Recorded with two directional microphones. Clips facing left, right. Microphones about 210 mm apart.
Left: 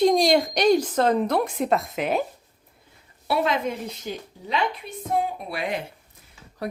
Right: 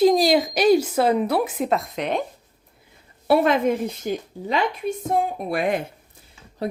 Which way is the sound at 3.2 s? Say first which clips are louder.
Right 6 dB; 50° right (ahead or behind).